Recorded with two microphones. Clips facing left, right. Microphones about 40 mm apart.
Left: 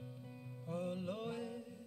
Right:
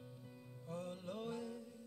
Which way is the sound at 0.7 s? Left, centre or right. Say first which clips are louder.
Left 5 dB; centre.